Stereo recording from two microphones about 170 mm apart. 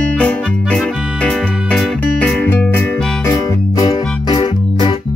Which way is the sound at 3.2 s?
20° left (ahead or behind).